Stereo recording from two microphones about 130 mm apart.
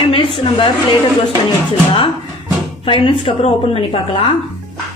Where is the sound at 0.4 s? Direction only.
40° left (ahead or behind).